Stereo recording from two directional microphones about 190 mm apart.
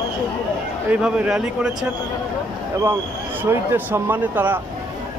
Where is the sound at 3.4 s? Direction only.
10° right (ahead or behind).